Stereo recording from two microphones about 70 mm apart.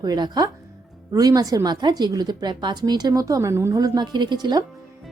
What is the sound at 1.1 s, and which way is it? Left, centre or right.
A woman's voice, right.